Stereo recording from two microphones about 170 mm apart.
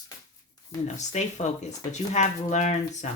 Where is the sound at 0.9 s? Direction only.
45° left (ahead or behind).